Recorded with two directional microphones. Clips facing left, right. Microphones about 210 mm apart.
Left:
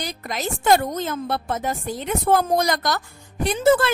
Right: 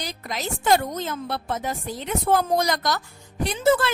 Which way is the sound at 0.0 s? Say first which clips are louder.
Left 3 dB; 50° left (ahead or behind).